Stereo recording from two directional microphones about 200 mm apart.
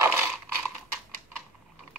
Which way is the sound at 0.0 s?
10° right (ahead or behind).